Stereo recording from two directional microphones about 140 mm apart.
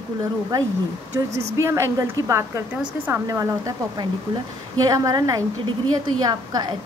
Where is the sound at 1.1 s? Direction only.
20° right (ahead or behind).